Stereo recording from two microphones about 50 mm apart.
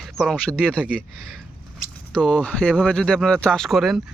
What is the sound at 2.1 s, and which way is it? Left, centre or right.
Speech, left.